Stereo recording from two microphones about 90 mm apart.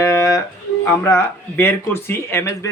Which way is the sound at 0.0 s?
35° left (ahead or behind).